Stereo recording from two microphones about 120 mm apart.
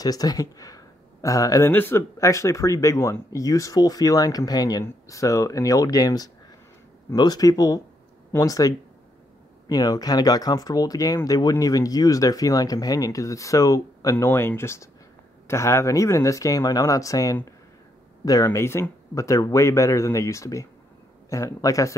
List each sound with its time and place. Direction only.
0.0 s speech: 30° left (ahead or behind)
1.7 s speech: 15° left (ahead or behind)